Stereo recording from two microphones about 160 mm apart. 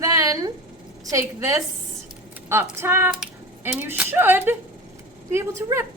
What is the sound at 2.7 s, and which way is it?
A woman's voice, 15° right (ahead or behind).